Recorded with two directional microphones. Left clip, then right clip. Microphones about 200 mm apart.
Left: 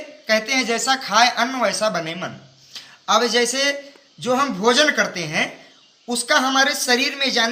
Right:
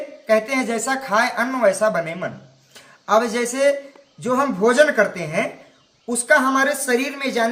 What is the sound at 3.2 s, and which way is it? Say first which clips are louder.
A man's voice: even; 15° right (ahead or behind).